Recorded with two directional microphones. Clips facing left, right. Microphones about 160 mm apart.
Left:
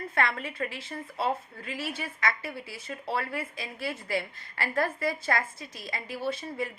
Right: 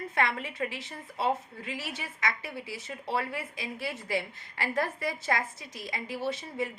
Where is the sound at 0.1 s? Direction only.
15° right (ahead or behind).